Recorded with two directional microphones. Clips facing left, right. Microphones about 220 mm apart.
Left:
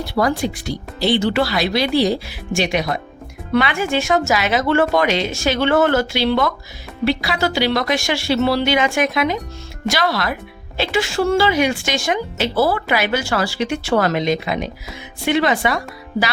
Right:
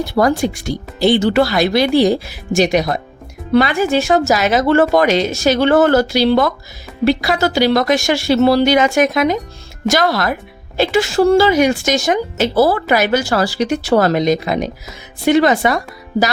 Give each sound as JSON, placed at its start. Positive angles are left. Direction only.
{"t": 0.0, "sound": "speech", "side_deg": -45}